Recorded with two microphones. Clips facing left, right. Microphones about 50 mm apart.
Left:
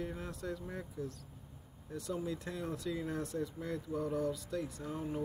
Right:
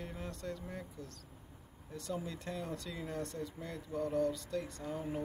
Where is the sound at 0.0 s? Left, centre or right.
Centre.